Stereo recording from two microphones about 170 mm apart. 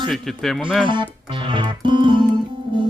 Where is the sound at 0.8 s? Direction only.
30° right (ahead or behind).